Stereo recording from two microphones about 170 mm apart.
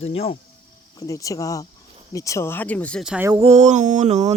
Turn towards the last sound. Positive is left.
turn(degrees=-40)  # may be behind; listen again after turning